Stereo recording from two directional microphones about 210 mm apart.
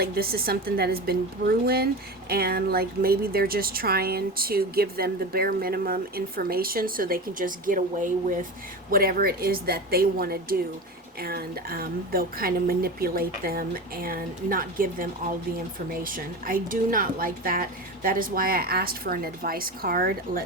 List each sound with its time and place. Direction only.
0.0 s speech: 45° right (ahead or behind)